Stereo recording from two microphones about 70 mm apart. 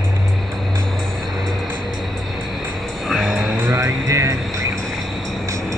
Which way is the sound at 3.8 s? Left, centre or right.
Right.